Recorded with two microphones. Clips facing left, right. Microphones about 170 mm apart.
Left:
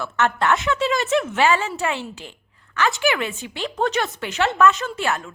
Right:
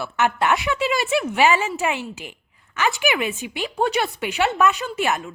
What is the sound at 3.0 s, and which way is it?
A woman's voice, 15° right (ahead or behind).